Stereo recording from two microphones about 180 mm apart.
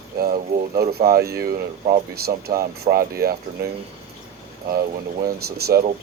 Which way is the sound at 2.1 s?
60° right (ahead or behind).